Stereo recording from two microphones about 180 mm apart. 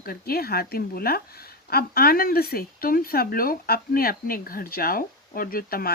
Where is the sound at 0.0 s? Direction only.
55° left (ahead or behind).